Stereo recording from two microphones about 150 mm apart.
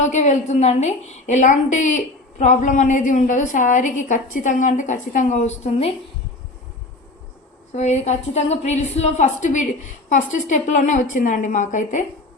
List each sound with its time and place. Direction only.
0.0 s a woman's voice: 50° left (ahead or behind)
7.7 s a woman's voice: 50° left (ahead or behind)